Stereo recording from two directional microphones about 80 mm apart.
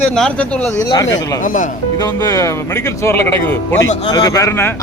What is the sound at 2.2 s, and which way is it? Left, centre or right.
Speech, left.